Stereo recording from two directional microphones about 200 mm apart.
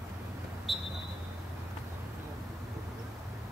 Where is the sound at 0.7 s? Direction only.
Centre (ahead or behind).